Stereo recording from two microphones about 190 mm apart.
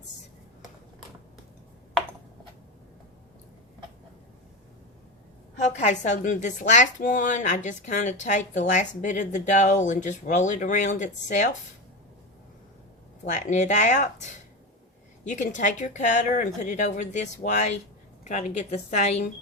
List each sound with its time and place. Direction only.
5.5 s speech: 35° left (ahead or behind)
13.2 s speech: 40° left (ahead or behind)